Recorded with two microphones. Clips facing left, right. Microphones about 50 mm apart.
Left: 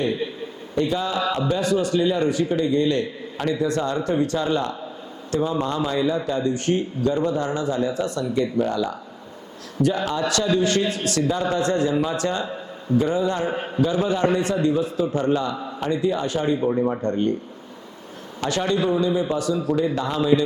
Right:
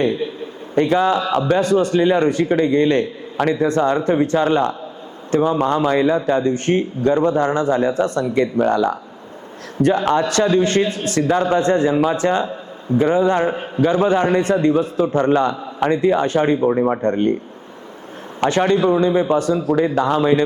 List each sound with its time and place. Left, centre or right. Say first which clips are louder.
0.8 s a man's voice: right 7 dB; right
18.3 s a man's voice: right 7 dB; right